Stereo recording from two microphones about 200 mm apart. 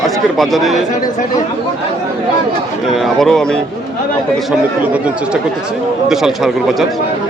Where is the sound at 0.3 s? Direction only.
Centre (ahead or behind).